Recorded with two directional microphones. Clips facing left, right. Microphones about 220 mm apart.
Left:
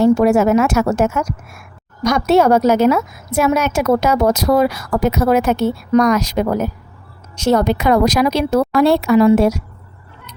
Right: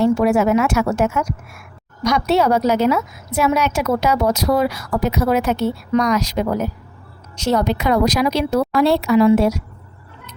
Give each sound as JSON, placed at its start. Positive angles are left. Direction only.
{"t": 0.0, "sound": "a woman's voice", "side_deg": 45}